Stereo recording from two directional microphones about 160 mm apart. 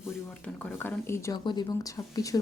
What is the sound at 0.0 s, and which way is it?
Speech, 5° left (ahead or behind).